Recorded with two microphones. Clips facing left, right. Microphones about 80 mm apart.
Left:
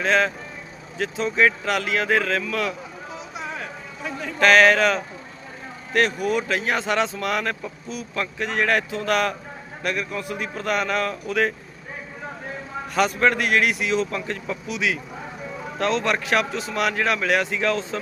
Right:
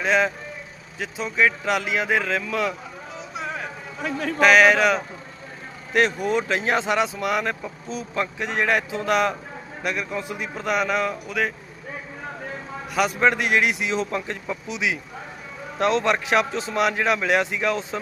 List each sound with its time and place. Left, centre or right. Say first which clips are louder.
0.0 s a man's voice: even; centre
1.6 s a man's voice: even; centre
4.4 s a man's voice: even; centre
5.9 s a man's voice: even; right
6.9 s a man's voice: right 1 dB; centre
11.3 s speech: left 3 dB; centre
12.9 s a man's voice: even; centre